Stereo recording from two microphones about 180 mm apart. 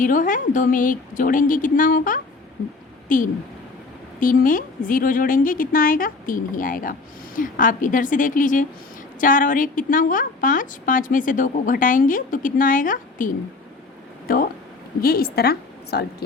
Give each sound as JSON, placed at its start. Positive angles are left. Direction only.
{"t": 0.0, "sound": "a woman's voice", "side_deg": 45}